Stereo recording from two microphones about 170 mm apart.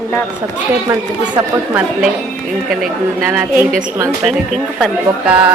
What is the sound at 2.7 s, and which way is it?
A woman's voice, centre (ahead or behind).